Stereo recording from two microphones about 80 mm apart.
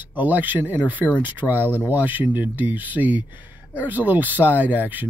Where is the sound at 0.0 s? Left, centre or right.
Right.